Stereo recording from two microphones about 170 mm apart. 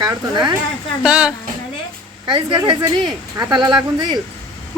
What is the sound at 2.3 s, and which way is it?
Speech, 25° right (ahead or behind).